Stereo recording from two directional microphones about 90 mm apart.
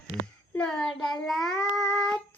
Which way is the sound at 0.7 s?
5° left (ahead or behind).